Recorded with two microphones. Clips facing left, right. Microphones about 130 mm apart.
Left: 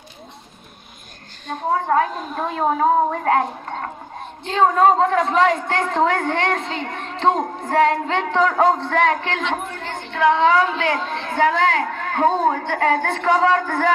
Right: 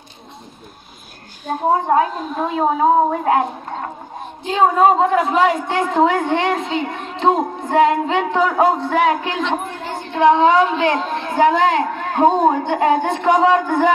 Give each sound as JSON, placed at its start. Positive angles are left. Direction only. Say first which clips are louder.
{"t": 1.7, "sound": "a woman's voice", "louder": "right 3 dB", "side_deg": -15}
{"t": 2.1, "sound": "a woman's voice", "louder": "right 4 dB", "side_deg": 0}
{"t": 9.5, "sound": "a sound", "louder": "right 3 dB", "side_deg": -10}
{"t": 10.1, "sound": "a woman's voice", "louder": "right 3 dB", "side_deg": -20}